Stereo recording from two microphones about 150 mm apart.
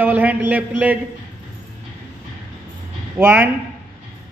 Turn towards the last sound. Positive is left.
turn(degrees=-15)  # may be behind; listen again after turning